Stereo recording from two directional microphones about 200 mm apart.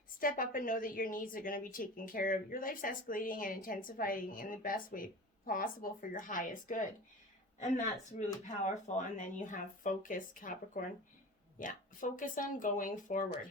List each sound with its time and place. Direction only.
0.2 s a woman's voice: 45° left (ahead or behind)